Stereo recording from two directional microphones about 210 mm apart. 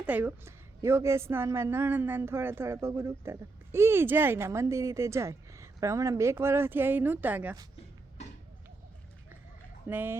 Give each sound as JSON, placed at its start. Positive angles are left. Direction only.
{"t": 0.0, "sound": "a woman's voice", "side_deg": -5}
{"t": 9.8, "sound": "a woman's voice", "side_deg": -10}